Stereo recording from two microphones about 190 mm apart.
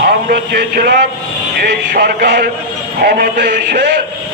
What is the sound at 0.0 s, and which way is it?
A man's voice, 55° right (ahead or behind).